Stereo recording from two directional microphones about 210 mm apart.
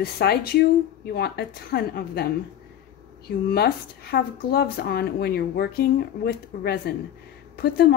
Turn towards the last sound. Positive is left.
turn(degrees=50)  # may be behind; listen again after turning